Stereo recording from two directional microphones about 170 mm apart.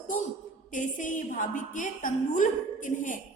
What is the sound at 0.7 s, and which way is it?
A woman's voice, 50° left (ahead or behind).